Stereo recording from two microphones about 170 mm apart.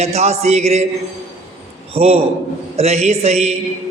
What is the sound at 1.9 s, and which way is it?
A man's voice, 35° right (ahead or behind).